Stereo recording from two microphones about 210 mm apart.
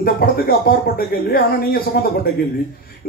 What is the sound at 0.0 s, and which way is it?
Speech, 45° left (ahead or behind).